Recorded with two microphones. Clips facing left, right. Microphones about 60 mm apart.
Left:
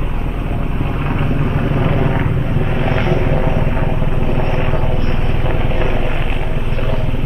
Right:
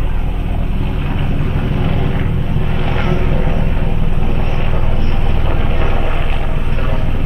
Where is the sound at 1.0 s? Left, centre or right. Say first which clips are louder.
Left 4 dB; left.